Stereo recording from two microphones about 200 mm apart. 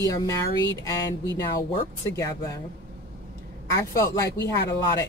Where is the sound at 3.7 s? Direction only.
15° left (ahead or behind).